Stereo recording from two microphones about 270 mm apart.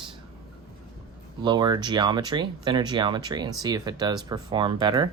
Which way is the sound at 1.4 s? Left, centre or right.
Centre.